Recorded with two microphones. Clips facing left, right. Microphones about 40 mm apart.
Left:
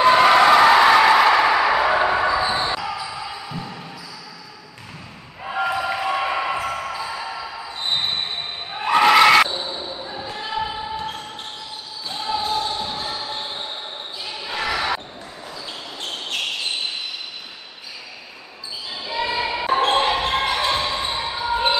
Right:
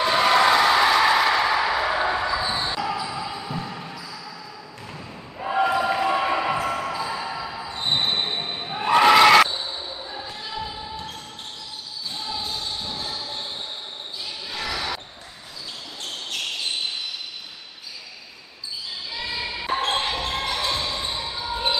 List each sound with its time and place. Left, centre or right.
0.0 s a sound: left
2.8 s basketball bounce: centre
5.4 s basketball bounce: centre
10.2 s basketball bounce: left
16.0 s basketball bounce: left
18.9 s basketball bounce: left